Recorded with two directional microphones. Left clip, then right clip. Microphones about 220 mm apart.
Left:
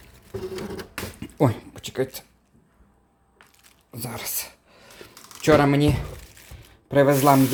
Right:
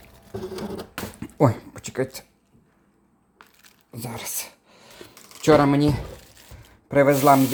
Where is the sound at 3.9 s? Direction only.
Centre (ahead or behind).